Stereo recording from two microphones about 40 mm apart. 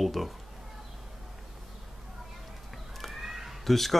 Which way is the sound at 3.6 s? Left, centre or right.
Centre.